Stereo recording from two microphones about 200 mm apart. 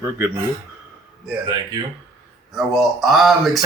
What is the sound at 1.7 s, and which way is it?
Speech, 20° right (ahead or behind).